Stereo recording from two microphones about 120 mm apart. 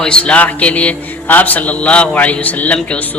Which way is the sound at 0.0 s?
10° left (ahead or behind).